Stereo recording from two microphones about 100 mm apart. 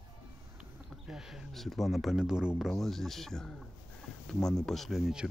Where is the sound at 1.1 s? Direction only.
5° right (ahead or behind).